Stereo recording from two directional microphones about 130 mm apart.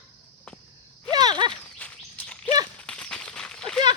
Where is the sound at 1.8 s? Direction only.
10° left (ahead or behind).